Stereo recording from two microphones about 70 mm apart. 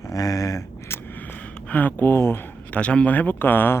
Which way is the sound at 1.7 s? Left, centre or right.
Left.